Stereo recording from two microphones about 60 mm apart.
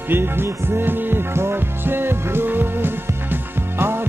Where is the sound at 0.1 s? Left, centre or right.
Right.